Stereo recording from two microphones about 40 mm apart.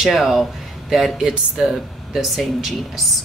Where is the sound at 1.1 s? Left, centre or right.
Centre.